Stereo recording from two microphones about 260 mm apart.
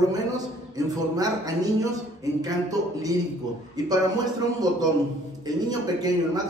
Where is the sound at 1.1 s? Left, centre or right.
Centre.